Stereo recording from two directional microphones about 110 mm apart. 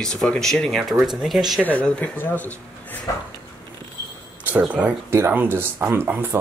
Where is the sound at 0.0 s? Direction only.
5° left (ahead or behind).